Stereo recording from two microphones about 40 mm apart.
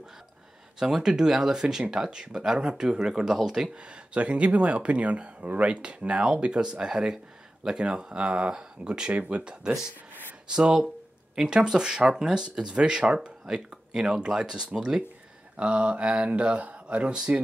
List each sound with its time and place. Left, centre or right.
0.7 s speech: centre
3.7 s speech: right